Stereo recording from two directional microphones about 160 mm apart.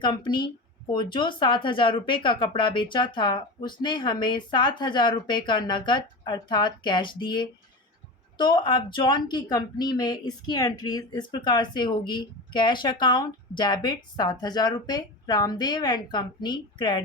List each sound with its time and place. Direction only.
0.0 s speech: 30° left (ahead or behind)